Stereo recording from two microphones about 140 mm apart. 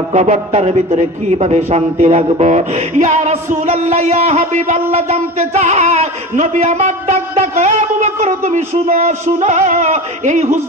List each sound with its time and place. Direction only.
0.1 s speech: 55° right (ahead or behind)